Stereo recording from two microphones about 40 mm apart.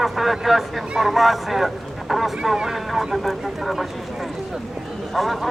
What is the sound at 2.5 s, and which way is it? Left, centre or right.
Speech, centre.